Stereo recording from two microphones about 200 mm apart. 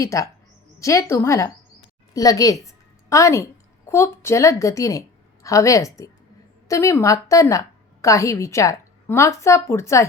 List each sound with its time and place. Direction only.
0.0 s a woman's voice: 15° left (ahead or behind)